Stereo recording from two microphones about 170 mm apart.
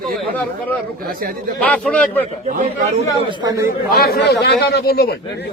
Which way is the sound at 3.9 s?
65° left (ahead or behind).